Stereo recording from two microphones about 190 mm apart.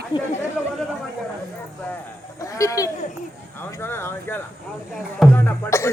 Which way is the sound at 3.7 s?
10° left (ahead or behind).